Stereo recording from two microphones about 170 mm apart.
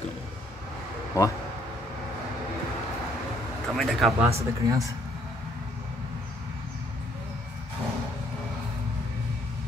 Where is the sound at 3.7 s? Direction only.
Centre (ahead or behind).